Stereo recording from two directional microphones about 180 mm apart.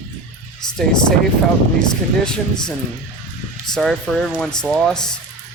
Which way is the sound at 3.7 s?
Centre (ahead or behind).